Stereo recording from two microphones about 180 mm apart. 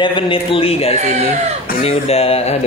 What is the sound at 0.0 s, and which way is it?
A man's voice, 30° left (ahead or behind).